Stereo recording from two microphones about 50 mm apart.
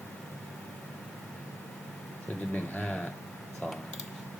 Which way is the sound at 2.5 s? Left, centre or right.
Left.